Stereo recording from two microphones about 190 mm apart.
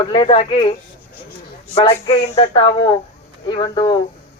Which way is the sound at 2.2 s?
30° left (ahead or behind).